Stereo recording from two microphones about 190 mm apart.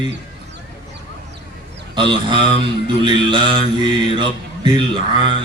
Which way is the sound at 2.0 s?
25° right (ahead or behind).